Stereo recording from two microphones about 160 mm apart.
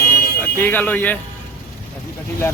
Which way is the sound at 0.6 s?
10° left (ahead or behind).